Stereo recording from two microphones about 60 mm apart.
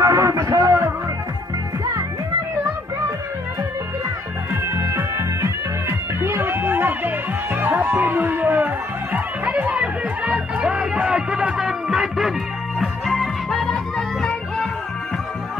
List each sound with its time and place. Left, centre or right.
0.0 s music: right
4.7 s music: right; by 14.7 s centre